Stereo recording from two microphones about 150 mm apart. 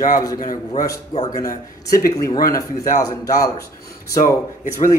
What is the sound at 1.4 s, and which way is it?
A man's voice, 20° left (ahead or behind).